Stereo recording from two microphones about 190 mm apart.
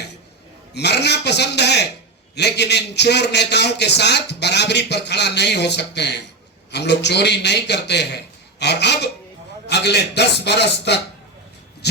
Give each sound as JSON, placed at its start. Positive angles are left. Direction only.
{"t": 0.7, "sound": "a man's voice", "side_deg": 60}